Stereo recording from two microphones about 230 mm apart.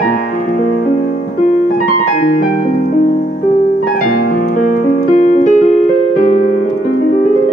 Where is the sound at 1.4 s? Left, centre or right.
Left.